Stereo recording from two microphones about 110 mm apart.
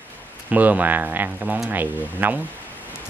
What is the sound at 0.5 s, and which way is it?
Speech, 15° right (ahead or behind).